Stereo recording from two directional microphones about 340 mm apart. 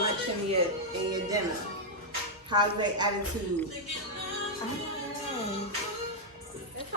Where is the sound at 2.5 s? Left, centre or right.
Centre.